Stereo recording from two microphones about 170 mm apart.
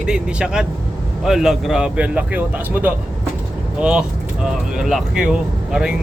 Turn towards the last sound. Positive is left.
turn(degrees=-5)  # may be behind; listen again after turning